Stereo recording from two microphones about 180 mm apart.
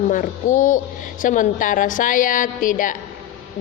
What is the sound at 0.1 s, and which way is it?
A woman's voice, 45° left (ahead or behind).